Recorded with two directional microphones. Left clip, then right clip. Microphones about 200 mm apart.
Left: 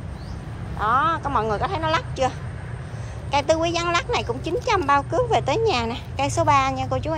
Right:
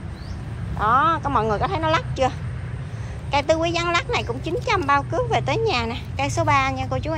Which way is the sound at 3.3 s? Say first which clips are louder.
Even; 15° left (ahead or behind).